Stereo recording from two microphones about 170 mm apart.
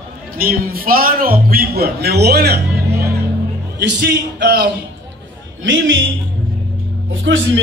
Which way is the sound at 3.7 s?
90° right.